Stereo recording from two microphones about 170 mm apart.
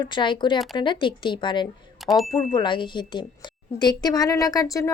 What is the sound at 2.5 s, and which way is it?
Speech, 30° left (ahead or behind).